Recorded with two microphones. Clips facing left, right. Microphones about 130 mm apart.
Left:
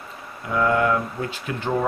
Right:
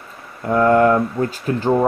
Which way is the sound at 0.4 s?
45° right (ahead or behind).